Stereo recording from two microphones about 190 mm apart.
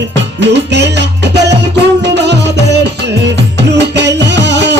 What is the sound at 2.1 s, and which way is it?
Music, 65° right (ahead or behind).